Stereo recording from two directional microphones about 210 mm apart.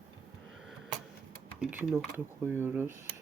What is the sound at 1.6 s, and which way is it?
Speech, 5° right (ahead or behind).